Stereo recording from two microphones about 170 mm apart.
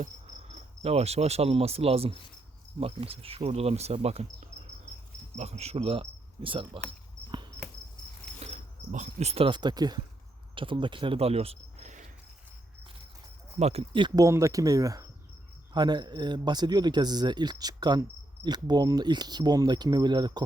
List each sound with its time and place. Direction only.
0.0 s cricket: 40° right (ahead or behind)
2.8 s speech: 35° right (ahead or behind)
5.4 s cricket: 40° right (ahead or behind)
8.4 s speech: 40° right (ahead or behind)
13.6 s speech: 40° right (ahead or behind)
14.3 s a man's voice: 20° right (ahead or behind)